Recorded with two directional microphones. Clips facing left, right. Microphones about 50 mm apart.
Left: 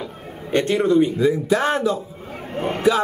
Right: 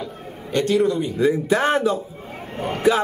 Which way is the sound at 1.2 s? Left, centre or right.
Right.